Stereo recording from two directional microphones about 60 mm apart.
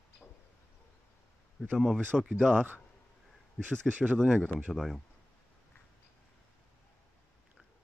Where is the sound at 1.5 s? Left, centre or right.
Centre.